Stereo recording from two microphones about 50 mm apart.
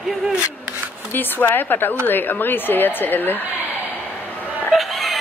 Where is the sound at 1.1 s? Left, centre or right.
Left.